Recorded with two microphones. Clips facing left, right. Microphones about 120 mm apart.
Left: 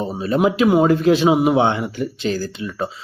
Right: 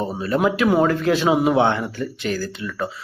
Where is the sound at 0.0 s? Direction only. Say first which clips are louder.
Left 2 dB; 20° left (ahead or behind).